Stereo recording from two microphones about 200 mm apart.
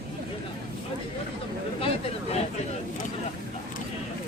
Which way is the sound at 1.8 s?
30° left (ahead or behind).